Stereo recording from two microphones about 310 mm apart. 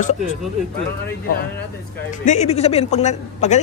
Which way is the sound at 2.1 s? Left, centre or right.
Left.